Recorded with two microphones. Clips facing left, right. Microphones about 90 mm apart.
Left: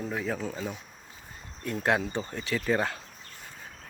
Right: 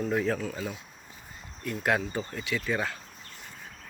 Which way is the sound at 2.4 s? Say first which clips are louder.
Left 4 dB; 35° left (ahead or behind).